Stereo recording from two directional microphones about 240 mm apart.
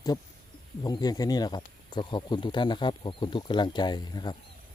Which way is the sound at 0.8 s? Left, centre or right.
Centre.